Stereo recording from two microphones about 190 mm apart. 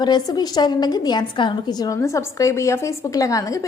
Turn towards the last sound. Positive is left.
turn(degrees=15)  # may be behind; listen again after turning